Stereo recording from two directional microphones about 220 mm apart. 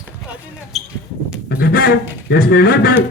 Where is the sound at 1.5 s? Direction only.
45° left (ahead or behind).